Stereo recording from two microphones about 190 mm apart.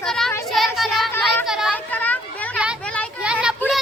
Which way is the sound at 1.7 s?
10° left (ahead or behind).